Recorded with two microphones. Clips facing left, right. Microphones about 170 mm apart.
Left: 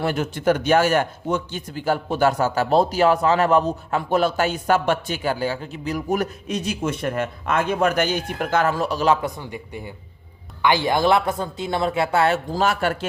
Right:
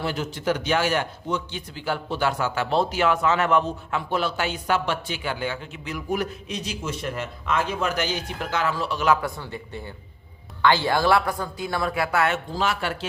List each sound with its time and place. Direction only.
0.0 s a man's voice: 55° left (ahead or behind); by 9.1 s 40° left (ahead or behind)
9.2 s speech: 15° left (ahead or behind)
12.5 s a man's voice: 45° left (ahead or behind)